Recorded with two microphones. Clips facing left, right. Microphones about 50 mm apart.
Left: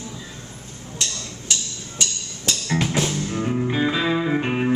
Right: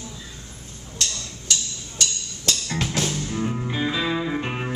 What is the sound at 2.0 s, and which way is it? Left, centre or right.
Music, centre.